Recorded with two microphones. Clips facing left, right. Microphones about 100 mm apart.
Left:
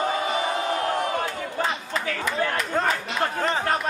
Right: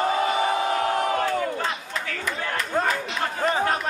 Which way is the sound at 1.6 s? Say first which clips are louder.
Left 2 dB; 10° left (ahead or behind).